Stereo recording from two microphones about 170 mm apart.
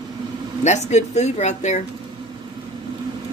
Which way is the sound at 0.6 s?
40° left (ahead or behind).